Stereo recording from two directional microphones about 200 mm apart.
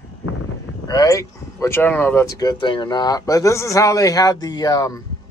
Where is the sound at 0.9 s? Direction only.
15° left (ahead or behind).